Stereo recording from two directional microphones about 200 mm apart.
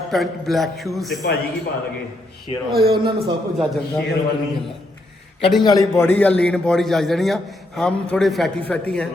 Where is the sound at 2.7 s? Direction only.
50° right (ahead or behind).